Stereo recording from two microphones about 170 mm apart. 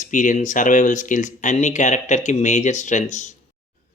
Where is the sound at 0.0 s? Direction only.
50° left (ahead or behind).